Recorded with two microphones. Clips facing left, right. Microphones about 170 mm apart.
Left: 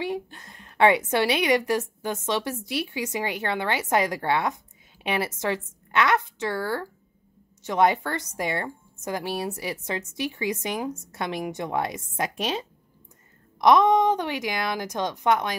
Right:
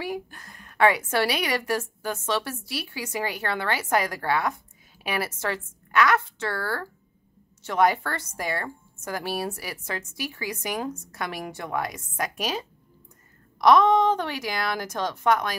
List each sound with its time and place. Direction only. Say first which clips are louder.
0.0 s a woman's voice: left 2 dB; 25° left (ahead or behind)